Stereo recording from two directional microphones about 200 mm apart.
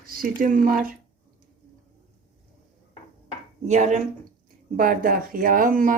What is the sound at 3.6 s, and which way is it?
A woman's voice, 35° right (ahead or behind).